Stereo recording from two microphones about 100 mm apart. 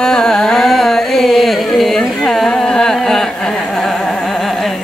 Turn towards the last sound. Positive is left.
turn(degrees=5)  # may be behind; listen again after turning